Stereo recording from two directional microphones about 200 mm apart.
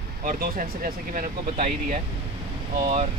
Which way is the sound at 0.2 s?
40° right (ahead or behind).